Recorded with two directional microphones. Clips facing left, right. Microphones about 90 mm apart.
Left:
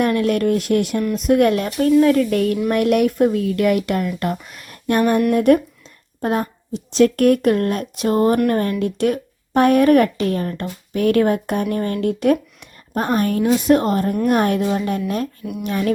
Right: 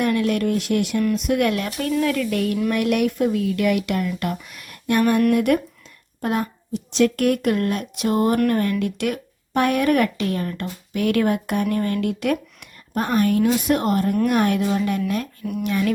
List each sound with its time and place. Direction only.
0.0 s speech: 45° left (ahead or behind)